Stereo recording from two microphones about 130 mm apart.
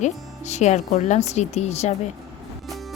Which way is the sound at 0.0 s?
60° left (ahead or behind).